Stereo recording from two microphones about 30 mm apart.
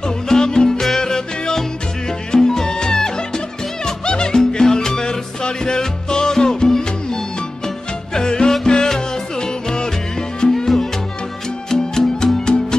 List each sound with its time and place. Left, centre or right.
0.3 s music: left
11.7 s music: centre